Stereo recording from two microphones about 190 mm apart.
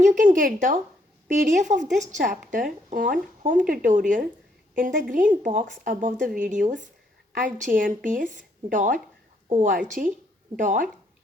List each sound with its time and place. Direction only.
0.0 s a woman's voice: 45° right (ahead or behind)